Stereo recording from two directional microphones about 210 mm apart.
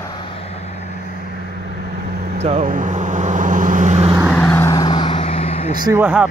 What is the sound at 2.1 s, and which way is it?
Vehicle, 50° right (ahead or behind).